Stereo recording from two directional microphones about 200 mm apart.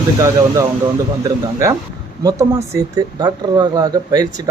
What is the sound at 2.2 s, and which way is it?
Speech, 20° right (ahead or behind).